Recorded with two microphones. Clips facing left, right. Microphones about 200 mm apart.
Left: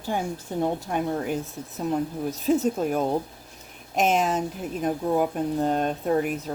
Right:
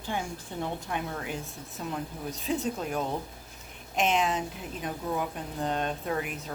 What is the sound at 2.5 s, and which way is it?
A woman's voice, 45° left (ahead or behind).